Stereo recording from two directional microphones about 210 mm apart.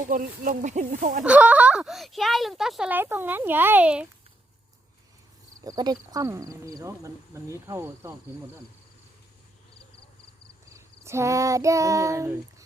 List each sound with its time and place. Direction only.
0.0 s speech: 40° right (ahead or behind)
1.2 s speech: 5° right (ahead or behind)
5.6 s speech: 20° right (ahead or behind)
10.8 s child singing: 15° right (ahead or behind)